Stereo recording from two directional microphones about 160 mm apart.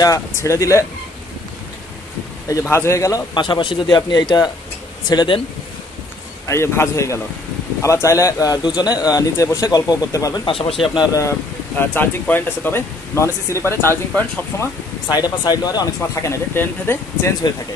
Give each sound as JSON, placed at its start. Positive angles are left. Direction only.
{"t": 0.0, "sound": "speech", "side_deg": 20}
{"t": 2.4, "sound": "speech", "side_deg": 20}
{"t": 6.4, "sound": "speech", "side_deg": 15}
{"t": 11.8, "sound": "speech", "side_deg": 10}
{"t": 15.0, "sound": "speech", "side_deg": 25}